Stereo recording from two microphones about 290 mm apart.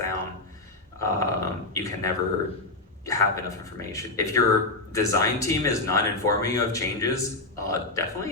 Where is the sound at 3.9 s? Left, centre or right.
Centre.